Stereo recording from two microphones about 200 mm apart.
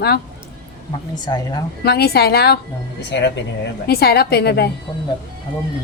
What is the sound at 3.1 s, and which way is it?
Speech, 60° left (ahead or behind).